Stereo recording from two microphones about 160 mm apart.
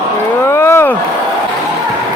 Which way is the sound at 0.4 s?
15° left (ahead or behind).